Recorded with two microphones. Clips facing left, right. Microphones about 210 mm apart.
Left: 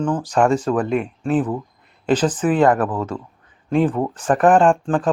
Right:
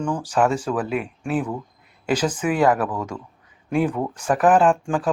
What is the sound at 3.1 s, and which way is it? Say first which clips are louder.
Speech: left 4 dB; 20° left (ahead or behind).